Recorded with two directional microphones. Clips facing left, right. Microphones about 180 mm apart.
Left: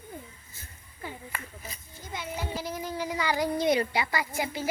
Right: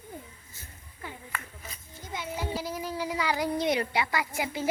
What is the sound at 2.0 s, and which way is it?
Child singing, 15° right (ahead or behind).